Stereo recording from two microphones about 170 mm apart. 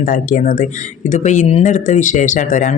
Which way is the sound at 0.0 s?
50° left (ahead or behind).